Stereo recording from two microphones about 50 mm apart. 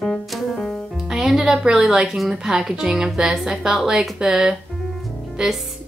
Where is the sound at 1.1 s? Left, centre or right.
Centre.